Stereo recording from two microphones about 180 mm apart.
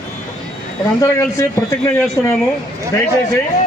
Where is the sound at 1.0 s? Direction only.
15° left (ahead or behind).